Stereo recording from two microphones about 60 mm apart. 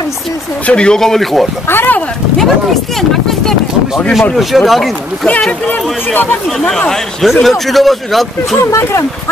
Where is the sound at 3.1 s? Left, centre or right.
Centre.